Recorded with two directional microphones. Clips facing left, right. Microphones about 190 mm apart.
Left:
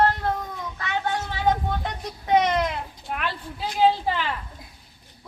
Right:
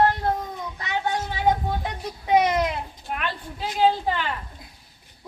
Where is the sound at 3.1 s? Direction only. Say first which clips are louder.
Even; centre (ahead or behind).